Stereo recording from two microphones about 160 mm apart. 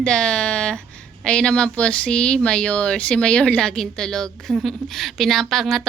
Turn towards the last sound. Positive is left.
turn(degrees=0)  # may be behind; listen again after turning